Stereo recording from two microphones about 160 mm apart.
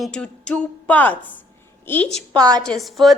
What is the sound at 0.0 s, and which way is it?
A woman's voice, 5° left (ahead or behind).